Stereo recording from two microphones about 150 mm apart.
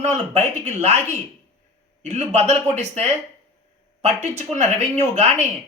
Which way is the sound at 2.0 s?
50° right (ahead or behind).